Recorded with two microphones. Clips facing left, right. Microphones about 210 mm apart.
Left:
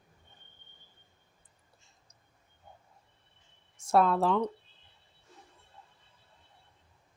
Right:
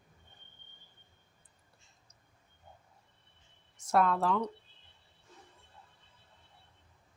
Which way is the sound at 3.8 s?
30° left (ahead or behind).